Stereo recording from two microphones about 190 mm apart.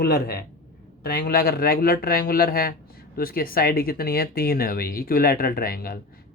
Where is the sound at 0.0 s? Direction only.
55° left (ahead or behind).